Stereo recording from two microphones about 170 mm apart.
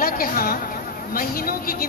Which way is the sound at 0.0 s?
60° left (ahead or behind).